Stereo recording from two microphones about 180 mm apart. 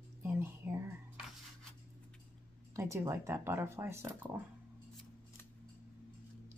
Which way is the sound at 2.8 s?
15° right (ahead or behind).